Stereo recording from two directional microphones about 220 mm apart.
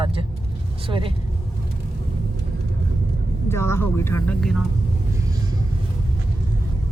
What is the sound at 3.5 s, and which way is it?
Speech, 10° left (ahead or behind).